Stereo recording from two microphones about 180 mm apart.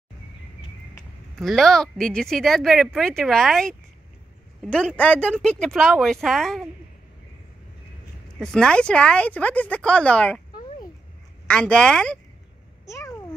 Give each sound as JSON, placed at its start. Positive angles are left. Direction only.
{"t": 1.4, "sound": "speech", "side_deg": 0}
{"t": 8.4, "sound": "speech", "side_deg": 5}
{"t": 11.4, "sound": "speech", "side_deg": 5}
{"t": 12.8, "sound": "cat", "side_deg": 15}